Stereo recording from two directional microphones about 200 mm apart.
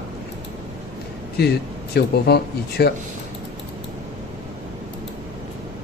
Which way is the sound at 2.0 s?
55° left (ahead or behind).